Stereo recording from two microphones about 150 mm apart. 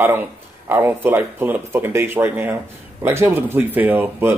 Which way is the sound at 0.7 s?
15° right (ahead or behind).